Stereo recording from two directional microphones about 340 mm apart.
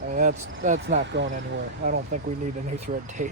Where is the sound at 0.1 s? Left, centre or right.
Right.